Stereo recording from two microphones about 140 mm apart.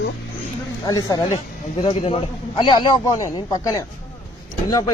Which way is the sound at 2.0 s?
50° left (ahead or behind).